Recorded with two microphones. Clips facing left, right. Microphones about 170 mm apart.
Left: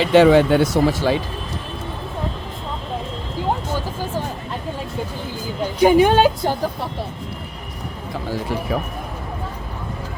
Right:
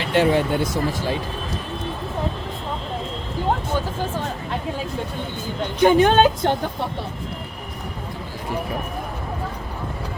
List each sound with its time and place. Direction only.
0.1 s speech: 90° left
5.6 s speech: 10° left (ahead or behind)